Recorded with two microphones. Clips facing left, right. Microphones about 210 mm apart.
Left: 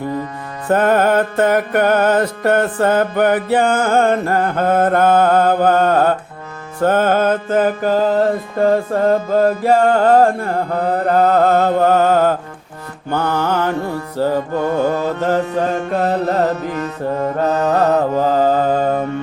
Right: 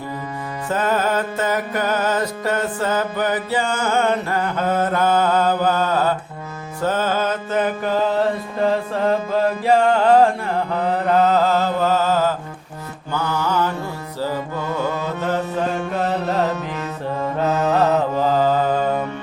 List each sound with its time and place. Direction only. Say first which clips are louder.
0.7 s music: left 7 dB; 60° left (ahead or behind)
17.4 s mantra: left 2 dB; 40° left (ahead or behind)